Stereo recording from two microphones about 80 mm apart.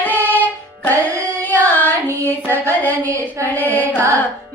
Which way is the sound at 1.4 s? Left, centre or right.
Left.